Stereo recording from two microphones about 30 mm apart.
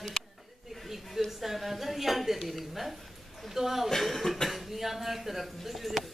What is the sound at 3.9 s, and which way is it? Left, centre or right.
A man's voice, centre.